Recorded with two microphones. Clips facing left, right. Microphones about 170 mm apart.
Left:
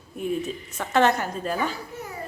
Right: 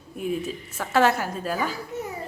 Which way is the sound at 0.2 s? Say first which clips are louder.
Left 1 dB; 5° right (ahead or behind).